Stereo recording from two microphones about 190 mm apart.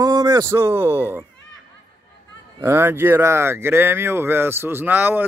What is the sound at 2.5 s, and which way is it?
Speech, 15° right (ahead or behind).